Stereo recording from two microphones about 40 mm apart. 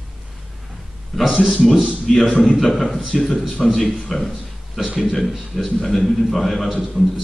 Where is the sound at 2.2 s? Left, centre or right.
Left.